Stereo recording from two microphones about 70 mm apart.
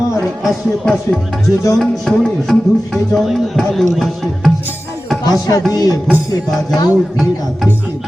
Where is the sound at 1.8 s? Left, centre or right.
Centre.